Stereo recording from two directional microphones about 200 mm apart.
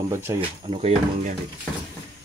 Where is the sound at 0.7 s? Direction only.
35° right (ahead or behind).